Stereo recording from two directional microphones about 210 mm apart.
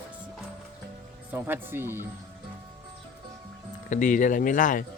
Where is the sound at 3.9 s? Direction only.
35° left (ahead or behind).